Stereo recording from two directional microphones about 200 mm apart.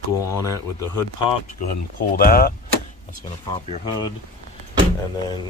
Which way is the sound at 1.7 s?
45° left (ahead or behind).